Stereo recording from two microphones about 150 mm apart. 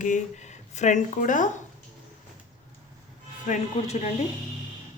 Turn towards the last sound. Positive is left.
turn(degrees=45)  # may be behind; listen again after turning